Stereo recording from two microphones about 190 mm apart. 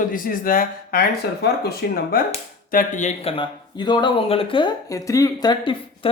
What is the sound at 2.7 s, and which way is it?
Speech, 40° left (ahead or behind).